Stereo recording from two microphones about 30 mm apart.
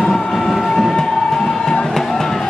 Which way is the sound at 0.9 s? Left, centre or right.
Centre.